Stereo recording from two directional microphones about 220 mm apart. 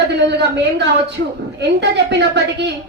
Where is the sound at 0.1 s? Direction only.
50° right (ahead or behind).